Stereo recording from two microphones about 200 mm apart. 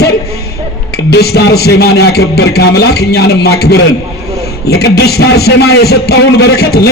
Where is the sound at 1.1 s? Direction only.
55° left (ahead or behind).